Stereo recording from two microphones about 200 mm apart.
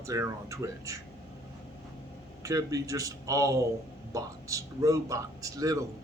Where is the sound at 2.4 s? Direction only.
15° right (ahead or behind).